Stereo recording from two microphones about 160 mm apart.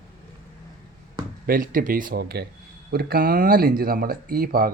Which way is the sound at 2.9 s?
70° right (ahead or behind).